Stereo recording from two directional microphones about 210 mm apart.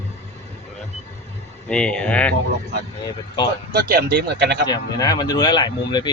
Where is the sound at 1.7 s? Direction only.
5° left (ahead or behind).